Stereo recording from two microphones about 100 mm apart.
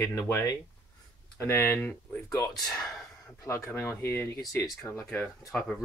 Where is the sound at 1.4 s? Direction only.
25° left (ahead or behind).